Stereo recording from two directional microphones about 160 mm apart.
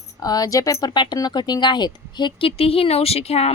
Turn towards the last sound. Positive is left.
turn(degrees=40)  # may be behind; listen again after turning